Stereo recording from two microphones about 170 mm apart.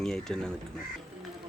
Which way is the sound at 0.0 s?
5° left (ahead or behind).